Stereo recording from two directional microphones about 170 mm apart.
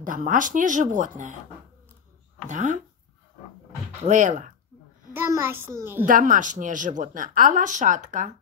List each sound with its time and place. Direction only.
0.0 s speech: 50° right (ahead or behind)
2.4 s speech: 45° right (ahead or behind)
4.1 s speech: 45° right (ahead or behind)
5.1 s a child's voice: 15° right (ahead or behind)
6.0 s speech: 50° right (ahead or behind)